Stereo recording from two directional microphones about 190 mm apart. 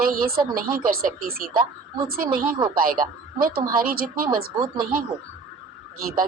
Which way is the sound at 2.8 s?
45° right (ahead or behind).